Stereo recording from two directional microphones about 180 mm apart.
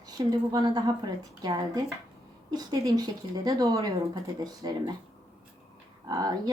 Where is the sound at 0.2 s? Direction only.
20° right (ahead or behind).